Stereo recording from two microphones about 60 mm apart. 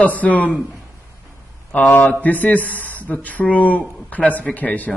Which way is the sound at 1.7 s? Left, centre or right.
Left.